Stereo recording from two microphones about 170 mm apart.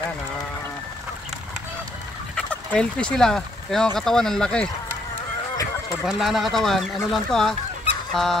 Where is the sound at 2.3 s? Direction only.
5° left (ahead or behind).